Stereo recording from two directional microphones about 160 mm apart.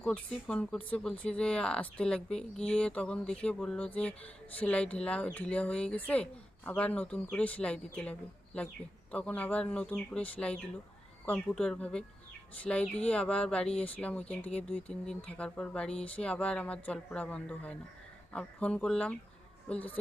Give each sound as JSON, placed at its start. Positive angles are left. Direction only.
{"t": 0.0, "sound": "speech", "side_deg": 5}
{"t": 9.1, "sound": "a woman's voice", "side_deg": 10}